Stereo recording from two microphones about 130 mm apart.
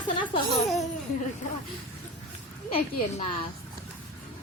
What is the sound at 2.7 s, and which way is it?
Speech, 55° left (ahead or behind).